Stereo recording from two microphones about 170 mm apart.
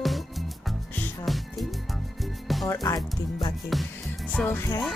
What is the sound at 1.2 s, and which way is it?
Speech, centre (ahead or behind).